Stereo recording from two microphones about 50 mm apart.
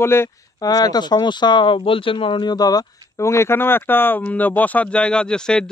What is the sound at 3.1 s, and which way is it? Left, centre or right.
Speech, left.